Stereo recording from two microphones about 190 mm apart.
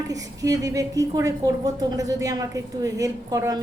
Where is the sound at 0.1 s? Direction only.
20° right (ahead or behind).